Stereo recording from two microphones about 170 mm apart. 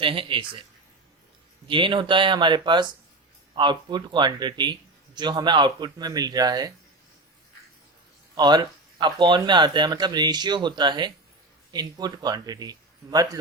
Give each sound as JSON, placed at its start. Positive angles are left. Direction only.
{"t": 0.0, "sound": "a man's voice", "side_deg": -30}
{"t": 1.6, "sound": "speech", "side_deg": -30}
{"t": 8.4, "sound": "speech", "side_deg": -25}